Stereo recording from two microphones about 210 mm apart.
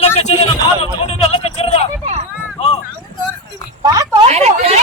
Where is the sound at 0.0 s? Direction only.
30° left (ahead or behind).